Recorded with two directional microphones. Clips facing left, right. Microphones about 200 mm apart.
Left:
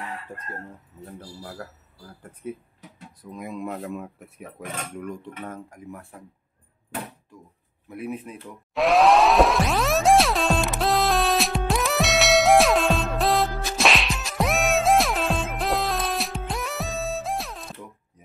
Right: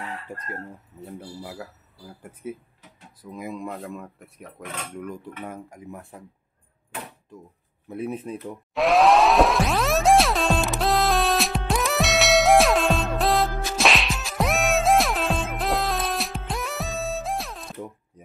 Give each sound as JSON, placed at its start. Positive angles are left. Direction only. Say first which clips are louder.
{"t": 0.4, "sound": "speech", "louder": "right 2 dB", "side_deg": -10}
{"t": 5.4, "sound": "speech", "louder": "even", "side_deg": -15}
{"t": 7.9, "sound": "speech", "louder": "right 3 dB", "side_deg": -30}
{"t": 8.7, "sound": "music", "louder": "even", "side_deg": 0}